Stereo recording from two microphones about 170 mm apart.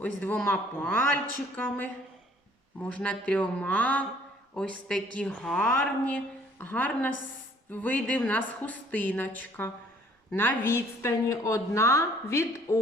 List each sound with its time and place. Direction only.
0.0 s a woman's voice: 10° left (ahead or behind)